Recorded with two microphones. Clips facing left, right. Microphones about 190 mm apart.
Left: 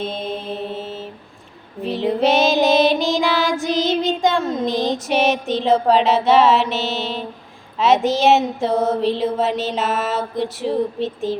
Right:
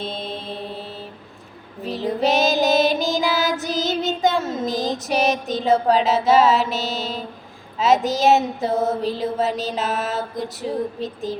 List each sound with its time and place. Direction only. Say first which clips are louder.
0.0 s music: left 4 dB; 30° right (ahead or behind)
0.4 s mantra: left 4 dB; 5° left (ahead or behind)
1.8 s child singing: left 3 dB; centre (ahead or behind)
7.8 s a sound: left 2 dB; centre (ahead or behind)